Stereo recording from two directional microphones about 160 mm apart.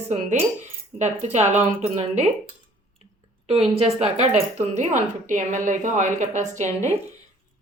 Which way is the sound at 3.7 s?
35° right (ahead or behind).